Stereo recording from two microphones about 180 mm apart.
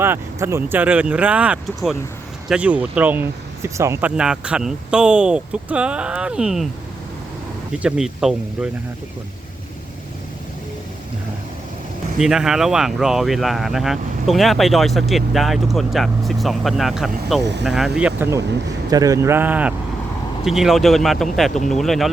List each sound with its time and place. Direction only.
0.0 s speech: 15° right (ahead or behind)
7.7 s speech: 5° right (ahead or behind)
12.2 s speech: 5° right (ahead or behind)
17.4 s speech: 70° right (ahead or behind)
17.7 s speech: 5° right (ahead or behind)